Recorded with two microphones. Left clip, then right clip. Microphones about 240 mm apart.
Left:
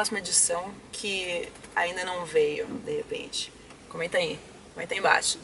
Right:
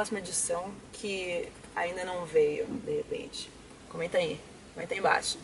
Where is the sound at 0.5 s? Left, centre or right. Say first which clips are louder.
Left 3 dB; centre.